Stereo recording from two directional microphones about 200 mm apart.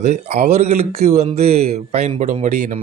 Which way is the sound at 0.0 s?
35° right (ahead or behind).